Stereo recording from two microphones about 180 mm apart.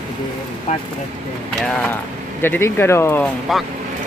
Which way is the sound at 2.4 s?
10° left (ahead or behind).